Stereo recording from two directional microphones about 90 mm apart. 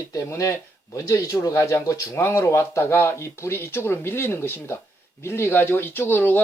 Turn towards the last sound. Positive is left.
turn(degrees=20)  # may be behind; listen again after turning